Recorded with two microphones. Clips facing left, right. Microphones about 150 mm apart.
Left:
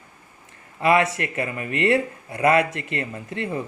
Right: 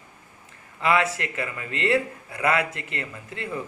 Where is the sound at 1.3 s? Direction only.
25° left (ahead or behind).